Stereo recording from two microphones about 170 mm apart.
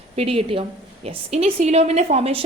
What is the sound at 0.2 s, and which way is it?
A woman's voice, 35° right (ahead or behind).